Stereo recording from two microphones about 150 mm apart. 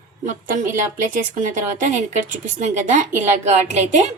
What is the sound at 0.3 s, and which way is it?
A woman's voice, 55° right (ahead or behind).